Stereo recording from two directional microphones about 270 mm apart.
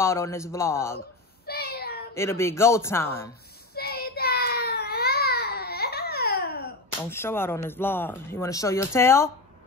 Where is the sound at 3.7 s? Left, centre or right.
Left.